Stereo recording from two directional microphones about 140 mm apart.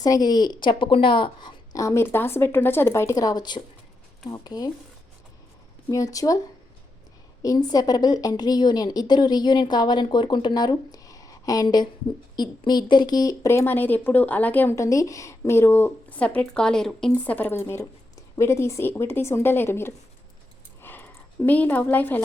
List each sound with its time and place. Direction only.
0.0 s a woman's voice: 25° left (ahead or behind)
5.9 s a woman's voice: 25° left (ahead or behind)
7.4 s a woman's voice: 25° left (ahead or behind)
20.8 s a sound: 15° left (ahead or behind)